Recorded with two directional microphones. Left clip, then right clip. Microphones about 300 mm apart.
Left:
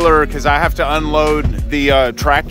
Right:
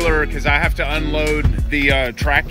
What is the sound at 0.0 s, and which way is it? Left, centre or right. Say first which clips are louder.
Speech: left 6 dB; centre.